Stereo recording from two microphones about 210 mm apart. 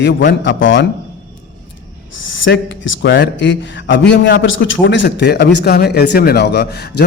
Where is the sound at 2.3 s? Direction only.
60° left (ahead or behind).